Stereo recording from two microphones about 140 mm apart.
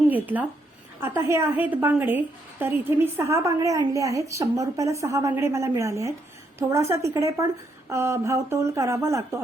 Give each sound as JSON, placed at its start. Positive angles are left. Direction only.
{"t": 0.1, "sound": "a woman's voice", "side_deg": -10}